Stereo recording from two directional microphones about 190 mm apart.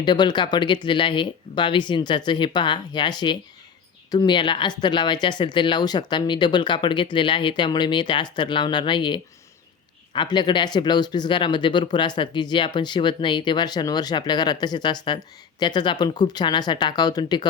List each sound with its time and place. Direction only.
0.0 s speech: 25° left (ahead or behind)